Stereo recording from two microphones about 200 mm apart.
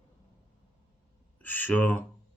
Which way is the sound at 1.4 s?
10° left (ahead or behind).